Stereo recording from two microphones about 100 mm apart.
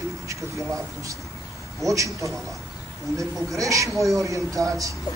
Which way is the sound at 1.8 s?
30° right (ahead or behind).